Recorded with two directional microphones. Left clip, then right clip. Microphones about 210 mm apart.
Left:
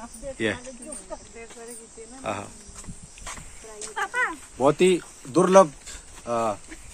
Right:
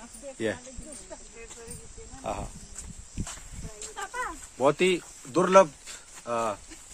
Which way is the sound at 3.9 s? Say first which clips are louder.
Left 9 dB; 20° left (ahead or behind).